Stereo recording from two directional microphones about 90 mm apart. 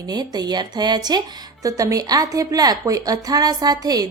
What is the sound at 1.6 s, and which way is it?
A woman's voice, 40° right (ahead or behind).